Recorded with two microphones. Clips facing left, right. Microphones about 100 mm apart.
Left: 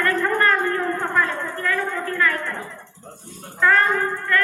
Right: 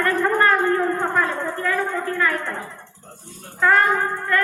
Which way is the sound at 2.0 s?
20° right (ahead or behind).